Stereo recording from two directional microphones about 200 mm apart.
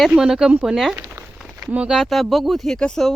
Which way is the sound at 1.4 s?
Centre (ahead or behind).